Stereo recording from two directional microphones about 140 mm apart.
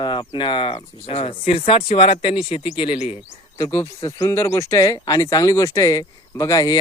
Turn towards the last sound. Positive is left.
turn(degrees=25)  # may be behind; listen again after turning